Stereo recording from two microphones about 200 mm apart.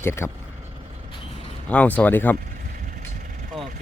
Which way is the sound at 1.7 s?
5° left (ahead or behind).